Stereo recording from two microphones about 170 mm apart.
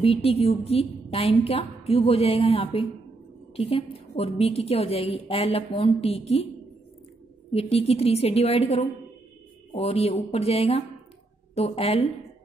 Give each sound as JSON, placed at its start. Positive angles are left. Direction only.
{"t": 0.0, "sound": "a woman's voice", "side_deg": 35}
{"t": 7.5, "sound": "a woman's voice", "side_deg": 35}